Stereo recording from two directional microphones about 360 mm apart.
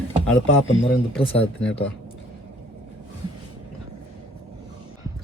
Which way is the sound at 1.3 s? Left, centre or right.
Centre.